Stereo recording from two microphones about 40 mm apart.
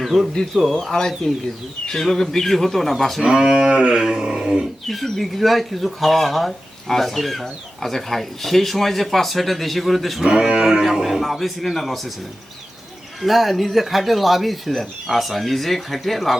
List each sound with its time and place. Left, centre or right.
0.0 s a man's voice: centre
0.9 s a man's voice: centre
3.2 s speech: centre
4.9 s speech: centre
10.2 s speech: centre
10.8 s speech: centre
13.2 s speech: centre